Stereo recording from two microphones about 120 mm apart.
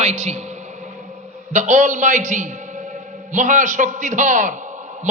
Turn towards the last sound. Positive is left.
turn(degrees=-90)